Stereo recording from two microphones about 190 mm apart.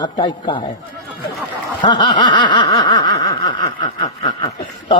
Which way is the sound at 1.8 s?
25° left (ahead or behind).